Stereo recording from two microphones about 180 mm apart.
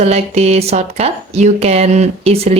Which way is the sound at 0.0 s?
35° right (ahead or behind).